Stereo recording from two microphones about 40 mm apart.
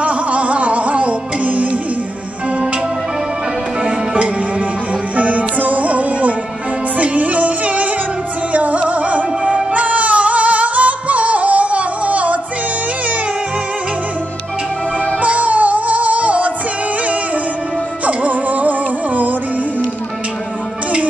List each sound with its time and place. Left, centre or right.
0.0 s music: right
3.8 s music: right
5.1 s music: right
15.1 s music: right
18.0 s music: right